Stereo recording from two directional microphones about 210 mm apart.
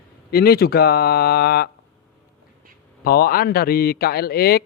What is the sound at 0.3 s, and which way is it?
A man's voice, 45° left (ahead or behind).